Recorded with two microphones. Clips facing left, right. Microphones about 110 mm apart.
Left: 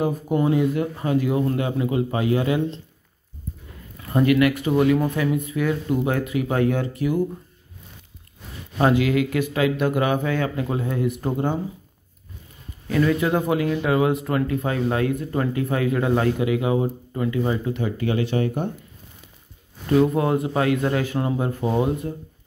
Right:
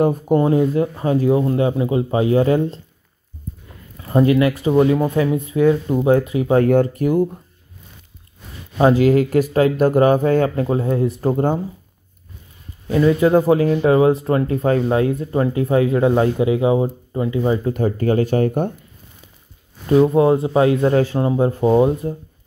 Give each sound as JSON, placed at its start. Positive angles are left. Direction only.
{"t": 0.0, "sound": "speech", "side_deg": -45}
{"t": 4.0, "sound": "speech", "side_deg": -25}
{"t": 6.6, "sound": "speech", "side_deg": -45}
{"t": 8.9, "sound": "speech", "side_deg": -40}
{"t": 12.8, "sound": "speech", "side_deg": -25}
{"t": 17.6, "sound": "speech", "side_deg": -45}
{"t": 19.9, "sound": "speech", "side_deg": -25}